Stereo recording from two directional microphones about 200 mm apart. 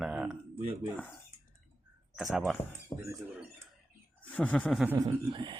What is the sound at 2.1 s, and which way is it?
Speech, centre (ahead or behind).